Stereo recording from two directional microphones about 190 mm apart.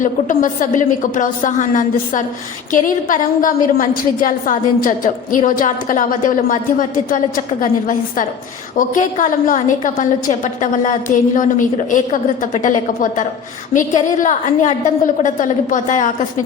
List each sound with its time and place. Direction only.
0.0 s a woman's voice: 45° left (ahead or behind)